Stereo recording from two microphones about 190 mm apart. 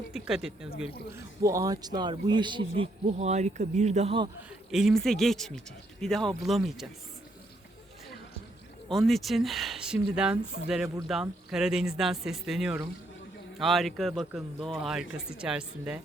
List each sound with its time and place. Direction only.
0.1 s speech: centre (ahead or behind)
1.1 s a man's voice: 15° right (ahead or behind)
4.7 s speech: centre (ahead or behind)
8.9 s speech: centre (ahead or behind)